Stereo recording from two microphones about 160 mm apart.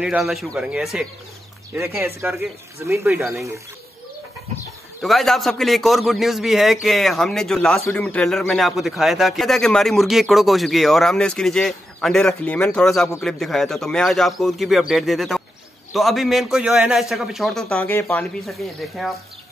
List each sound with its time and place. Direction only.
0.0 s a man's voice: 5° right (ahead or behind)
2.0 s speech: 15° right (ahead or behind)
5.0 s a man's voice: centre (ahead or behind)
17.7 s speech: 15° left (ahead or behind)
18.5 s a man's voice: centre (ahead or behind)